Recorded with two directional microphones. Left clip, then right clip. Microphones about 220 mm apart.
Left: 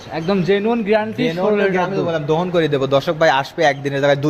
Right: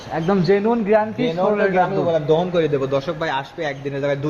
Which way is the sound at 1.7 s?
40° left (ahead or behind).